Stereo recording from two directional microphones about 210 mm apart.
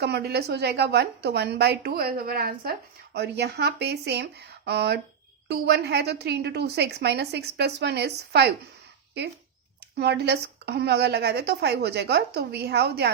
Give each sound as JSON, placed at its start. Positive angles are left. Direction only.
{"t": 0.0, "sound": "a woman's voice", "side_deg": -50}
{"t": 10.0, "sound": "a woman's voice", "side_deg": -50}